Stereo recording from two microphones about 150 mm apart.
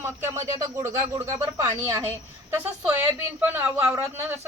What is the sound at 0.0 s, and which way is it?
Speech, 15° right (ahead or behind).